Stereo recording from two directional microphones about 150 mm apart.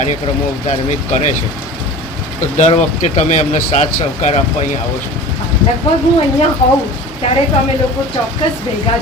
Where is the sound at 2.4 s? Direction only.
50° left (ahead or behind).